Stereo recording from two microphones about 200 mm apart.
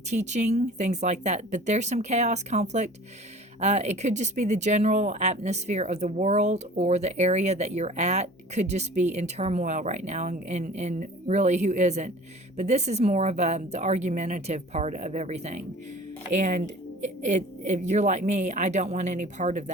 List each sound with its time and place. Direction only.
0.1 s speech: 35° right (ahead or behind)